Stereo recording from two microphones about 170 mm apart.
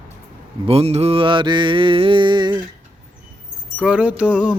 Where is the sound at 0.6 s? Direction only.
35° right (ahead or behind).